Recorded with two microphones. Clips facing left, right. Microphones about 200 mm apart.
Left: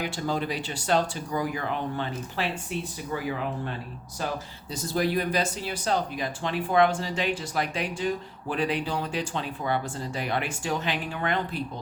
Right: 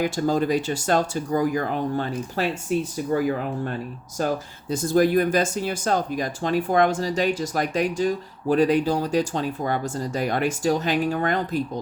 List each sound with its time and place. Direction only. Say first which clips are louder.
0.0 s speech: right 7 dB; 45° right (ahead or behind)